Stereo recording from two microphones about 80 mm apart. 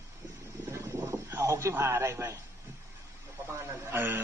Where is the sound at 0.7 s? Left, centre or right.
Right.